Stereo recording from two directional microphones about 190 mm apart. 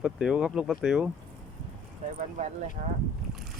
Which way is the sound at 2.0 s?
40° right (ahead or behind).